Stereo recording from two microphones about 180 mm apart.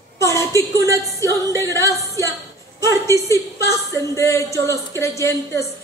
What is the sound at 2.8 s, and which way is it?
A woman's voice, 15° left (ahead or behind).